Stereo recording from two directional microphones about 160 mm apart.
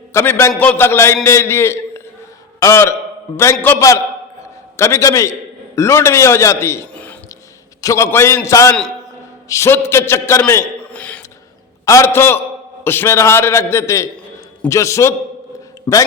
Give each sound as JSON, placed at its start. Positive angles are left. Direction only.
{"t": 0.1, "sound": "a man's voice", "side_deg": 15}
{"t": 10.5, "sound": "a sound", "side_deg": 10}
{"t": 11.9, "sound": "a man's voice", "side_deg": 15}